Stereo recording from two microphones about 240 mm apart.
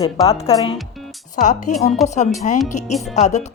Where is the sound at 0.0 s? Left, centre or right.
Centre.